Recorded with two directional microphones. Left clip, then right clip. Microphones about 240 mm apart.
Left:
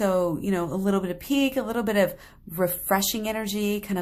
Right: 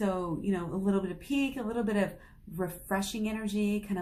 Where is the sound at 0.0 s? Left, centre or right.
Left.